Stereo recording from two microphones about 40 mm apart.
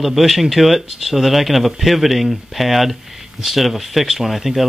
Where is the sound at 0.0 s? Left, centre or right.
Centre.